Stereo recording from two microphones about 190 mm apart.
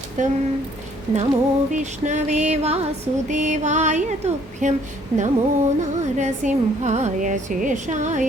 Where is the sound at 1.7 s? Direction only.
40° right (ahead or behind).